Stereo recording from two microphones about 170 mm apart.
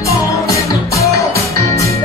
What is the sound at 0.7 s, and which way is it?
Music, 20° left (ahead or behind).